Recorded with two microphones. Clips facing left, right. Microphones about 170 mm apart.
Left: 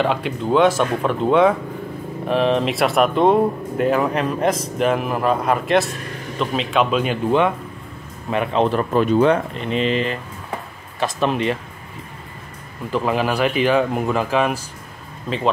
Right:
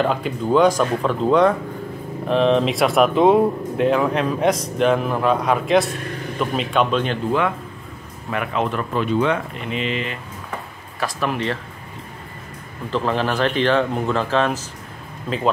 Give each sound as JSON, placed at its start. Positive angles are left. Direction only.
{"t": 0.0, "sound": "speech", "side_deg": 0}
{"t": 7.2, "sound": "speech", "side_deg": 20}
{"t": 11.0, "sound": "speech", "side_deg": 25}
{"t": 12.9, "sound": "a man's voice", "side_deg": 10}
{"t": 15.2, "sound": "speech", "side_deg": 0}